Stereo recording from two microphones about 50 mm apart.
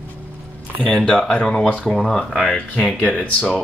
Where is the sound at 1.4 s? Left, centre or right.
Centre.